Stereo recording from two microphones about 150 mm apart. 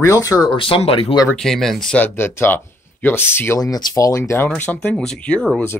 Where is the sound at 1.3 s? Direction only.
5° left (ahead or behind).